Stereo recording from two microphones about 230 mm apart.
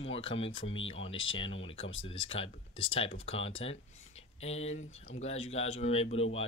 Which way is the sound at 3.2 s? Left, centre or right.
Left.